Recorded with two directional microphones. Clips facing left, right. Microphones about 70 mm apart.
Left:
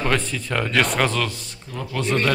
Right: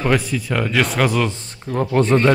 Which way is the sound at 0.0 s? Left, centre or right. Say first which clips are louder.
Right 4 dB; centre.